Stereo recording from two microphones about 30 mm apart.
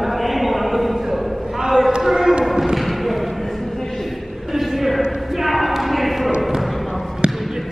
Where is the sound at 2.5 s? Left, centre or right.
Centre.